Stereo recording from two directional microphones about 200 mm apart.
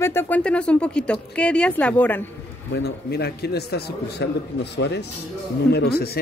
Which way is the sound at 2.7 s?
55° left (ahead or behind).